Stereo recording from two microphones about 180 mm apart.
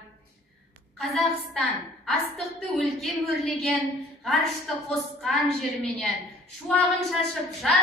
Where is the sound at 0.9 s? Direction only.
Centre (ahead or behind).